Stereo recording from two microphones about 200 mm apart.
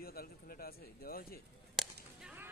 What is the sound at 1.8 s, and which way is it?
Whip, 5° right (ahead or behind).